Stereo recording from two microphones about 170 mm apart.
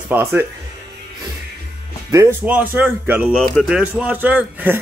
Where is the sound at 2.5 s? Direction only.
10° right (ahead or behind).